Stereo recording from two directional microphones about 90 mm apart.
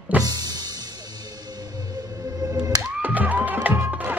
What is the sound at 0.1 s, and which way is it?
Music, 20° right (ahead or behind).